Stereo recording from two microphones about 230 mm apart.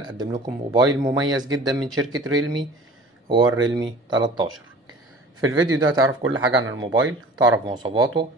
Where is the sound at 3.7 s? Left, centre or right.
Centre.